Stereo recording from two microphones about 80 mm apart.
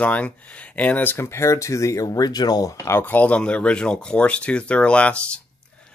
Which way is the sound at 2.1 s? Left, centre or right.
Left.